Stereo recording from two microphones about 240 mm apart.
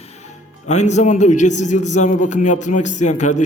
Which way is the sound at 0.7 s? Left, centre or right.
Left.